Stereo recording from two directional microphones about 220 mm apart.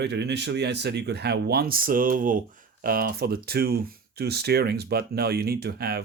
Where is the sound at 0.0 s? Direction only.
50° right (ahead or behind).